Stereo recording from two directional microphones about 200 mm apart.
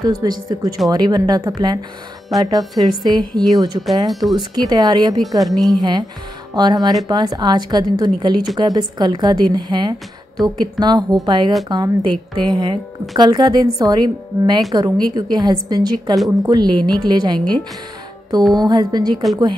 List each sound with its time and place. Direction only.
0.0 s a woman's voice: 20° right (ahead or behind)
2.3 s a woman's voice: centre (ahead or behind)
2.8 s a woman's voice: 20° right (ahead or behind)
4.1 s a woman's voice: centre (ahead or behind)
4.6 s a woman's voice: 20° right (ahead or behind)
5.4 s a woman's voice: centre (ahead or behind)
5.8 s a woman's voice: 20° right (ahead or behind)